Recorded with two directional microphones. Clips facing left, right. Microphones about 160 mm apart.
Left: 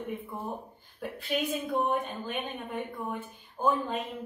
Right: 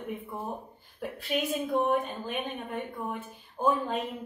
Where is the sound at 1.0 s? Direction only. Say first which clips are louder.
Even; centre (ahead or behind).